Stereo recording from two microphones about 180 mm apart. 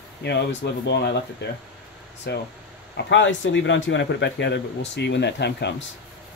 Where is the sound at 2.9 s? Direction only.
90° left; by 5.7 s 70° left (ahead or behind).